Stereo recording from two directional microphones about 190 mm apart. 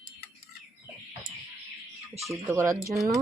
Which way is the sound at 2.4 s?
15° right (ahead or behind).